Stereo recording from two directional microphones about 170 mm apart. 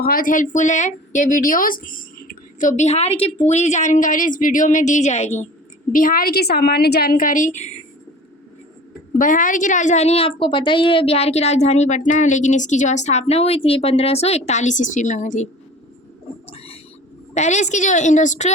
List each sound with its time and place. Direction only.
0.0 s a woman's voice: 55° left (ahead or behind); by 5.5 s 40° left (ahead or behind)
5.9 s a woman's voice: 55° left (ahead or behind)
9.1 s a woman's voice: 50° left (ahead or behind)
16.5 s a sound: 35° left (ahead or behind)
17.3 s a woman's voice: 45° left (ahead or behind)